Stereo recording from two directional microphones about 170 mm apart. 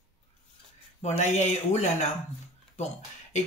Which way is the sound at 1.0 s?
45° left (ahead or behind).